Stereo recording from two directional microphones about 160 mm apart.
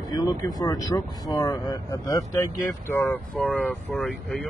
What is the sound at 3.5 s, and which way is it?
Speech, 10° left (ahead or behind).